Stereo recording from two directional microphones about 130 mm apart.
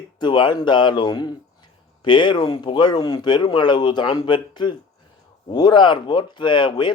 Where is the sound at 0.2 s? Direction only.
35° left (ahead or behind).